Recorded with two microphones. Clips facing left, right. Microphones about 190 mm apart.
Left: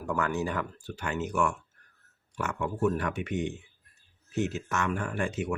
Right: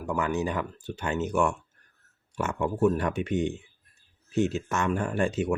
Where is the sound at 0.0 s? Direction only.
15° right (ahead or behind).